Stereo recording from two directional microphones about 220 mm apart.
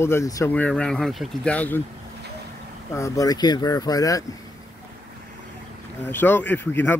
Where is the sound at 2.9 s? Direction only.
15° left (ahead or behind).